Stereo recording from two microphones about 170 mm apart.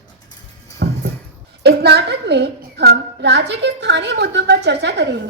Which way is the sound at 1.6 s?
75° right (ahead or behind).